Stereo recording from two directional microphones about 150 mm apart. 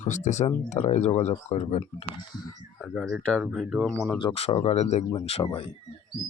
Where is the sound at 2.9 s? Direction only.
Centre (ahead or behind).